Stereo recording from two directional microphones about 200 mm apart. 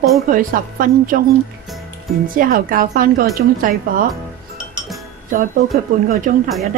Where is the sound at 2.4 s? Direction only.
45° right (ahead or behind).